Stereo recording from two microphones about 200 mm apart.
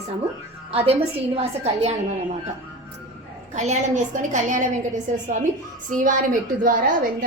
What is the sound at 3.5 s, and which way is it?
A woman's voice, 35° right (ahead or behind).